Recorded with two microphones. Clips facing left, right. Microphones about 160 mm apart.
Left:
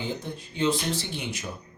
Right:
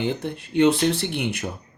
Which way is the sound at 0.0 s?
65° right (ahead or behind).